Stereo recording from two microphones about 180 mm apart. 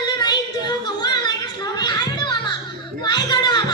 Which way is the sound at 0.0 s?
25° left (ahead or behind).